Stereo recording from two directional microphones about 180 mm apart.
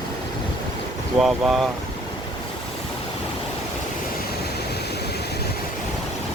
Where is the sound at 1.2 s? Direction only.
Centre (ahead or behind).